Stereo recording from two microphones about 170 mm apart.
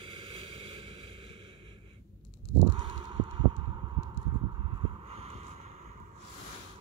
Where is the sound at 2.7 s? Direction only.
30° right (ahead or behind).